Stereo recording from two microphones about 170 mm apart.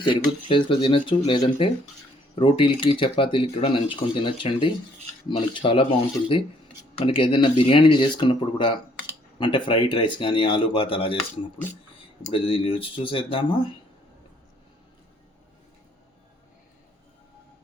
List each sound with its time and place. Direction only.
0.0 s speech: 30° left (ahead or behind)
12.3 s speech: 30° left (ahead or behind)